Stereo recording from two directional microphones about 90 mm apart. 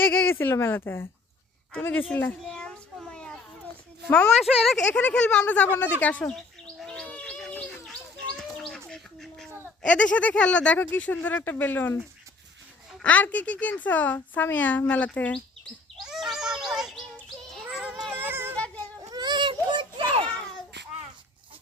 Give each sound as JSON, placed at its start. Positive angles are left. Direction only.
{"t": 0.0, "sound": "speech", "side_deg": 25}
{"t": 2.4, "sound": "child singing", "side_deg": 10}
{"t": 4.4, "sound": "speech", "side_deg": 0}
{"t": 4.9, "sound": "a woman's voice", "side_deg": 10}
{"t": 6.3, "sound": "bird", "side_deg": 5}
{"t": 9.8, "sound": "a woman's voice", "side_deg": 15}
{"t": 13.0, "sound": "a woman's voice", "side_deg": 15}
{"t": 16.0, "sound": "a sound", "side_deg": -5}
{"t": 17.7, "sound": "child singing", "side_deg": -10}
{"t": 18.1, "sound": "a sound", "side_deg": -20}
{"t": 18.5, "sound": "a sound", "side_deg": 15}
{"t": 19.1, "sound": "children playing", "side_deg": -55}